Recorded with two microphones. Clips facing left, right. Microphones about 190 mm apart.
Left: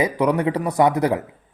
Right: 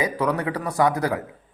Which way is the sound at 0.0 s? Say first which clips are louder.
Left 4 dB; 20° left (ahead or behind).